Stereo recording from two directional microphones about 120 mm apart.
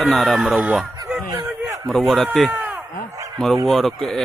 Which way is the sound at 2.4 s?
15° right (ahead or behind).